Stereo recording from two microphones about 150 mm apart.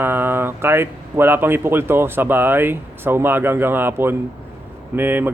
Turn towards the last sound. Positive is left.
turn(degrees=-15)  # may be behind; listen again after turning